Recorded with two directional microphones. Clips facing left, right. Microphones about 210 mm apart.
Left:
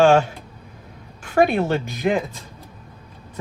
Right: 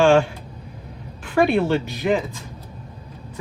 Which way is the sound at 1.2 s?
45° left (ahead or behind).